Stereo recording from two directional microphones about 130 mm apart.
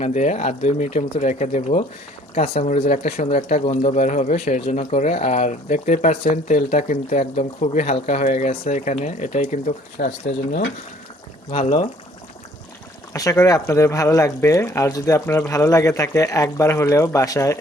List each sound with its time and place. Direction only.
0.0 s a man's voice: 60° left (ahead or behind)
2.3 s a man's voice: 50° left (ahead or behind)
11.5 s speech: 45° left (ahead or behind)
13.4 s speech: 25° left (ahead or behind)